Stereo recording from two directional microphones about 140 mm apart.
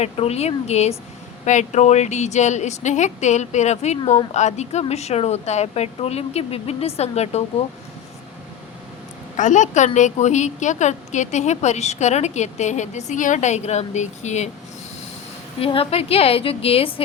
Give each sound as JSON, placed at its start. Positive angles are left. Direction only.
{"t": 0.0, "sound": "a woman's voice", "side_deg": 50}
{"t": 9.3, "sound": "a woman's voice", "side_deg": 60}
{"t": 15.6, "sound": "a woman's voice", "side_deg": 40}